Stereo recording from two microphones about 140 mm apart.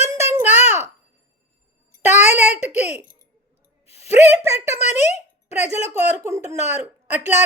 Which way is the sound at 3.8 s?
45° left (ahead or behind).